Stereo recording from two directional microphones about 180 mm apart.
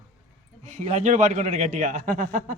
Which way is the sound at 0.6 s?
40° right (ahead or behind).